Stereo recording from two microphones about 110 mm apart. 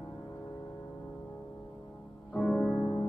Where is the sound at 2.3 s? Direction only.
5° left (ahead or behind).